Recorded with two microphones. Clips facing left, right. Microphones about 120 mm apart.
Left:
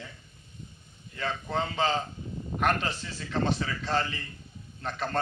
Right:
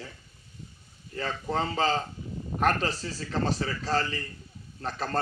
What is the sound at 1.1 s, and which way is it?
A man's voice, 35° right (ahead or behind).